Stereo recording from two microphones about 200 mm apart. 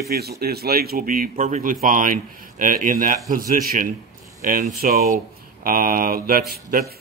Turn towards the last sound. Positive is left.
turn(degrees=-50)  # may be behind; listen again after turning